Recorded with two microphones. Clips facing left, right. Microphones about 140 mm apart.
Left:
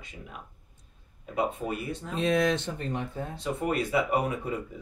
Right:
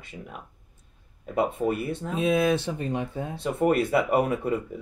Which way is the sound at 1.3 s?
50° right (ahead or behind).